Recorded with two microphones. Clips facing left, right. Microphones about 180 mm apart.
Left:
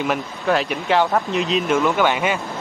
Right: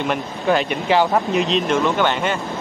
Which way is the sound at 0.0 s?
5° left (ahead or behind).